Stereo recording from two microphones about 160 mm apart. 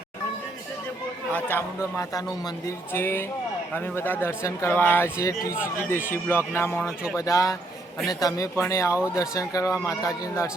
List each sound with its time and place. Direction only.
1.3 s speech: 10° left (ahead or behind)